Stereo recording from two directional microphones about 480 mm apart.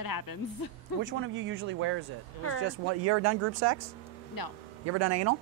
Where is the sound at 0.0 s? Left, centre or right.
Left.